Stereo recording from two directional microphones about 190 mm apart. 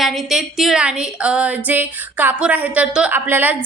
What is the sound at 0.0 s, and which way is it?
A woman's voice, centre (ahead or behind).